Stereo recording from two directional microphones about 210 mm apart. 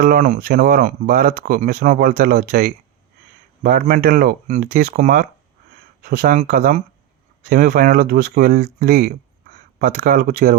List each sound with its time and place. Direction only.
0.0 s speech: 40° right (ahead or behind)